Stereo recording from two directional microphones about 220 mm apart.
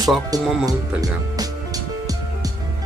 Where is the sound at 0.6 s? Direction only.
15° right (ahead or behind).